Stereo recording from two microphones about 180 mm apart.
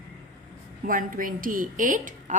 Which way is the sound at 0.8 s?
50° right (ahead or behind).